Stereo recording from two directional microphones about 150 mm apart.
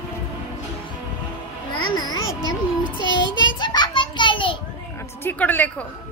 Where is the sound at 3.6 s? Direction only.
30° left (ahead or behind).